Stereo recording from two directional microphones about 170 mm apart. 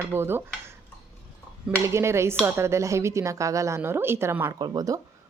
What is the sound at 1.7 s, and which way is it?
A woman's voice, 15° right (ahead or behind).